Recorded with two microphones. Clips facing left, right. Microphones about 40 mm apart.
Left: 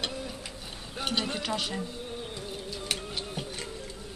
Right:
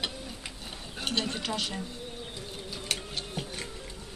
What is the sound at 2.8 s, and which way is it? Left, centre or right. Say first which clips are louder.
Music: even; centre.